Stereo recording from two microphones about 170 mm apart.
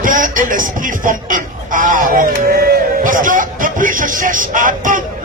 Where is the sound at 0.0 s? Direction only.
55° right (ahead or behind).